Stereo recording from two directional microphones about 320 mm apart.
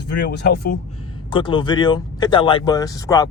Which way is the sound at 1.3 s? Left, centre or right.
Centre.